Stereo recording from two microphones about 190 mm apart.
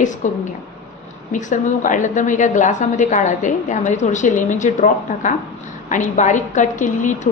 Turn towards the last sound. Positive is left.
turn(degrees=40)  # may be behind; listen again after turning